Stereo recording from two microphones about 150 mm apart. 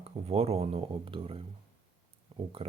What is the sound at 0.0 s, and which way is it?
A man's voice, 40° right (ahead or behind).